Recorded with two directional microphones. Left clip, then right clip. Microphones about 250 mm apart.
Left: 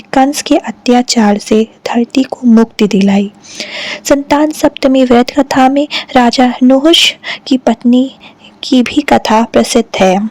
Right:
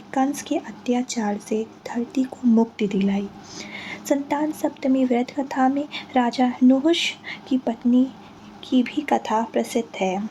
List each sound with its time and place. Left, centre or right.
0.1 s speech: left